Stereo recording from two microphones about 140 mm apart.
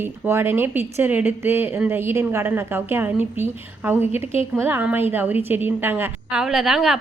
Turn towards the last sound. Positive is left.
turn(degrees=-5)  # may be behind; listen again after turning